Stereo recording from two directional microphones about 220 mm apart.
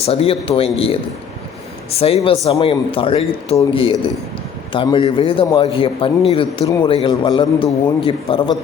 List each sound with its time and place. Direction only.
0.0 s a man's voice: 25° left (ahead or behind)